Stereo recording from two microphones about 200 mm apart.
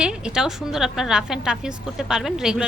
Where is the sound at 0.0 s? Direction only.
5° right (ahead or behind).